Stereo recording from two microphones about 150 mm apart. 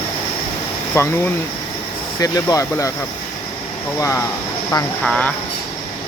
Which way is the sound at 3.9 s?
20° left (ahead or behind).